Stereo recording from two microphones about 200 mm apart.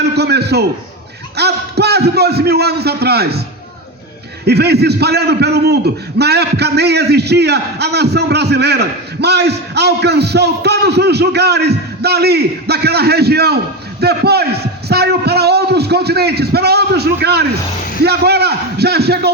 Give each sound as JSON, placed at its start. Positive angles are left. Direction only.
{"t": 0.0, "sound": "a man's voice", "side_deg": -55}
{"t": 4.4, "sound": "a man's voice", "side_deg": -55}